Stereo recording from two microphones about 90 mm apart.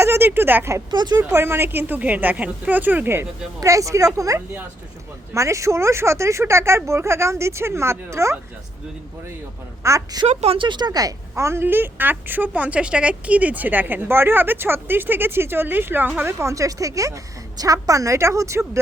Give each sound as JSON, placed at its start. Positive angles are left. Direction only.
{"t": 0.0, "sound": "speech", "side_deg": -25}
{"t": 0.9, "sound": "speech", "side_deg": -55}
{"t": 1.3, "sound": "a woman's voice", "side_deg": -25}
{"t": 3.6, "sound": "speech", "side_deg": -35}
{"t": 9.8, "sound": "speech", "side_deg": -35}
{"t": 10.5, "sound": "a woman's voice", "side_deg": -65}